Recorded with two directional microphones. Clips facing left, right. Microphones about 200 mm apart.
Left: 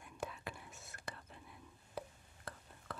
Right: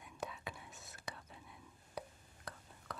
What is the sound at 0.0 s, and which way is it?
Whispering, centre (ahead or behind).